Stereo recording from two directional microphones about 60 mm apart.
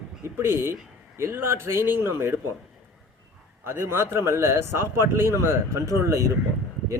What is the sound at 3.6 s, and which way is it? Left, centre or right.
Speech, right.